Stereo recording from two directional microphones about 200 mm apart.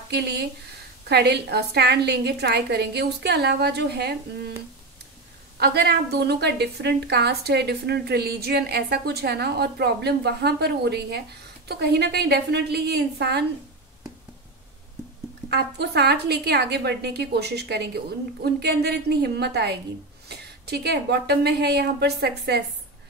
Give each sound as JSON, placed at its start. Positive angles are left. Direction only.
{"t": 0.1, "sound": "a woman's voice", "side_deg": -55}
{"t": 5.6, "sound": "a woman's voice", "side_deg": -55}
{"t": 15.5, "sound": "a woman's voice", "side_deg": -55}